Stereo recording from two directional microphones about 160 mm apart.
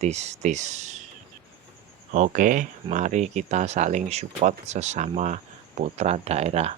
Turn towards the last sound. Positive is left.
turn(degrees=-40)  # may be behind; listen again after turning